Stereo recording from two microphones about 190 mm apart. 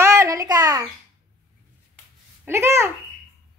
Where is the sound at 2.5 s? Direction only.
15° right (ahead or behind).